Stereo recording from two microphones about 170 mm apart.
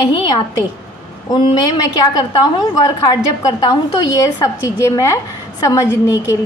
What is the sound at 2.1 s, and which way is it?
A woman's voice, 25° left (ahead or behind).